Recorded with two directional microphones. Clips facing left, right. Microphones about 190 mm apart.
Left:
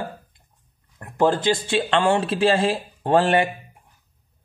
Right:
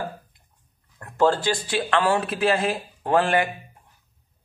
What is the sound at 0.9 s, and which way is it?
Speech, 15° left (ahead or behind).